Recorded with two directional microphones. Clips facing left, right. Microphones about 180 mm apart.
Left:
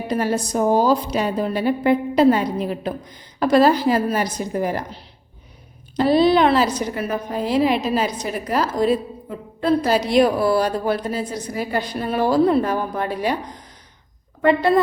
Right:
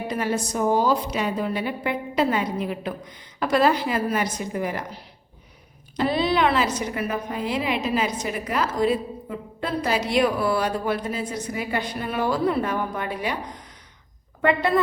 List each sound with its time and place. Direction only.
0.1 s a woman's voice: 35° left (ahead or behind)
6.1 s a woman's voice: 35° left (ahead or behind)